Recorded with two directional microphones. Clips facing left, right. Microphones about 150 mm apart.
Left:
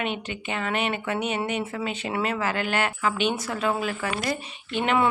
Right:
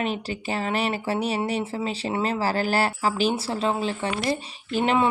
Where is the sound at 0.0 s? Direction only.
35° right (ahead or behind).